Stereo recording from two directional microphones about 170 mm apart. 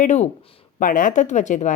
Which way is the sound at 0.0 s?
45° left (ahead or behind).